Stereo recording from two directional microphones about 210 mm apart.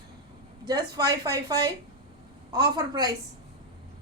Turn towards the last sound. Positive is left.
turn(degrees=-20)  # may be behind; listen again after turning